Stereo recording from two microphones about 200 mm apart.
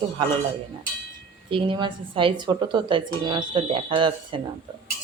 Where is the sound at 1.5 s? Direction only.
25° right (ahead or behind).